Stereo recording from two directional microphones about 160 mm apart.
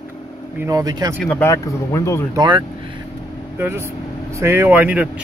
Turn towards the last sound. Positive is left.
turn(degrees=-10)  # may be behind; listen again after turning